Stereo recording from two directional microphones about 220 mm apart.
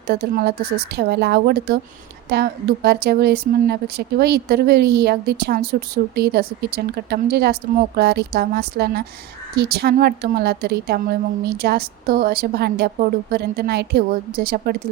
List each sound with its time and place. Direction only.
0.1 s speech: 45° right (ahead or behind)